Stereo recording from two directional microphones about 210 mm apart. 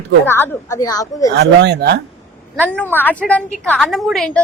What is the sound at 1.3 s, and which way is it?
Speech, 55° right (ahead or behind).